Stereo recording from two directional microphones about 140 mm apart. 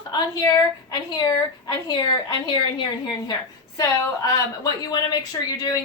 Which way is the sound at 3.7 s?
25° left (ahead or behind).